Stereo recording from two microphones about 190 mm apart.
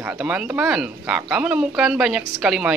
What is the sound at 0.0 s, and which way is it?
Speech, 5° right (ahead or behind).